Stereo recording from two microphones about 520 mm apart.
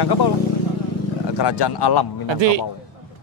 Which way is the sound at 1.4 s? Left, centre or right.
Left.